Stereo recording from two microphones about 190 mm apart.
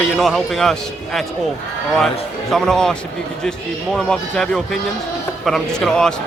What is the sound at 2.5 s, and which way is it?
A man's voice, 5° left (ahead or behind).